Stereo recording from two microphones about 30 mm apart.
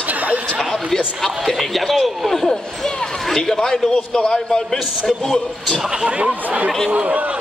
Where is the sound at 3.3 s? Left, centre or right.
Left.